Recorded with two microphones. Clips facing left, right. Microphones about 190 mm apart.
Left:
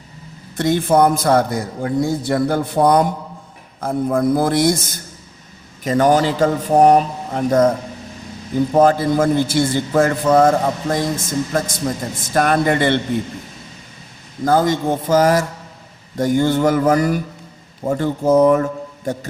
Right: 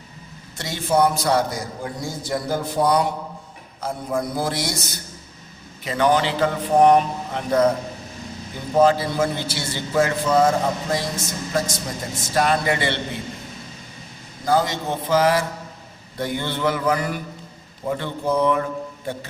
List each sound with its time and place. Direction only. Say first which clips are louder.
0.5 s a man's voice: left 6 dB; 55° left (ahead or behind)
8.7 s a man's voice: left 3 dB; 50° left (ahead or behind)
14.4 s a man's voice: left 5 dB; 50° left (ahead or behind)